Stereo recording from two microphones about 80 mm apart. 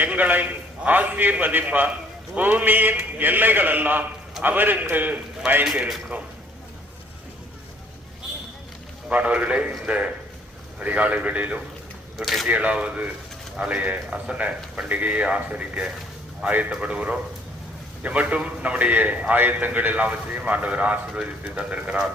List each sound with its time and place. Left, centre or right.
0.0 s a man's voice: right
9.0 s speech: centre
12.1 s speech: centre
12.5 s a man's voice: centre